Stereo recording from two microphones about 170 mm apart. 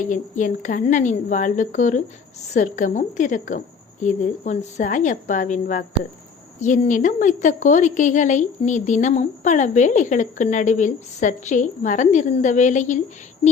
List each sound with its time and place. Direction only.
0.0 s a woman's voice: 45° left (ahead or behind)